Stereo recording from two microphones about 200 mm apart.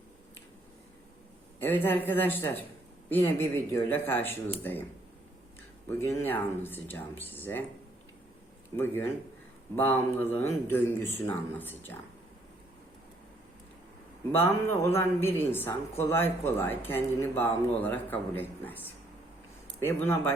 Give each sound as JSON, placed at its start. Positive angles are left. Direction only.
{"t": 1.5, "sound": "speech", "side_deg": 10}
{"t": 6.0, "sound": "speech", "side_deg": 10}
{"t": 8.7, "sound": "speech", "side_deg": 10}
{"t": 14.3, "sound": "speech", "side_deg": 10}